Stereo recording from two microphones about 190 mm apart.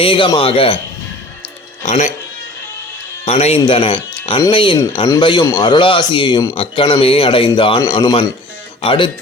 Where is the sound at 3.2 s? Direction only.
35° left (ahead or behind).